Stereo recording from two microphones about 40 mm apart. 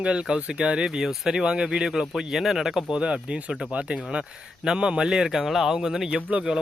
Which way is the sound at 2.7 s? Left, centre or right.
Right.